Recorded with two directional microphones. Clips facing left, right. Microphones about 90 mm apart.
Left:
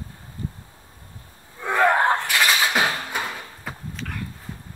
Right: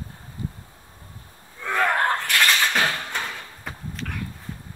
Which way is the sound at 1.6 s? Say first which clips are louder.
Left 3 dB; 10° left (ahead or behind).